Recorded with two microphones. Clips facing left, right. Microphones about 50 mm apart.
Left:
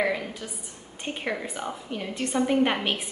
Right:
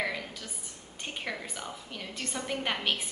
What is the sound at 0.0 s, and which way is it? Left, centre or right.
A woman's voice, centre.